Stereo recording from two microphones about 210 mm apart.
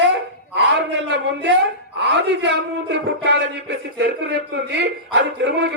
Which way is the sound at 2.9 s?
55° right (ahead or behind).